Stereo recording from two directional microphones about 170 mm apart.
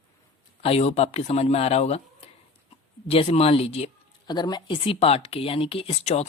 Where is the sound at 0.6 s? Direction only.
40° left (ahead or behind).